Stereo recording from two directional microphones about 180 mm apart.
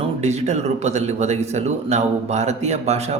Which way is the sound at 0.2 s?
40° right (ahead or behind).